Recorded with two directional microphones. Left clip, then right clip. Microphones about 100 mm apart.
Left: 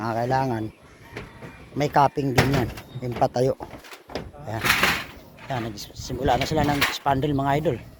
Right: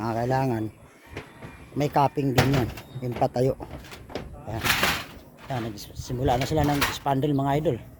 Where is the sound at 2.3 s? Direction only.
40° left (ahead or behind).